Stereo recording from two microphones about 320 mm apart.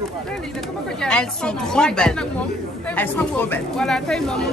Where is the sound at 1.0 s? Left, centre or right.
Centre.